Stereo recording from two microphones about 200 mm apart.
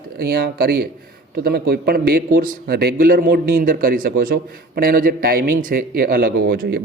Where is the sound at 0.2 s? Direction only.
50° right (ahead or behind).